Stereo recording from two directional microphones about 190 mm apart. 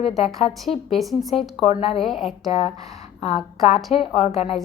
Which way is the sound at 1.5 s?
35° left (ahead or behind).